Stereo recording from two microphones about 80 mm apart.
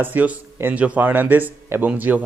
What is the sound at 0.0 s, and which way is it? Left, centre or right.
Speech, right.